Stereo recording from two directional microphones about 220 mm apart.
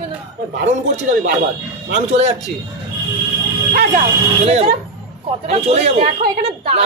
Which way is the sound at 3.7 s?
30° right (ahead or behind).